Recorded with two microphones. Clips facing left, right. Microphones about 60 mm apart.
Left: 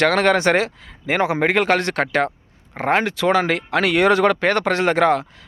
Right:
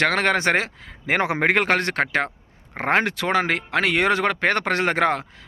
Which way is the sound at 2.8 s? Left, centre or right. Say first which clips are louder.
Left 2 dB; right.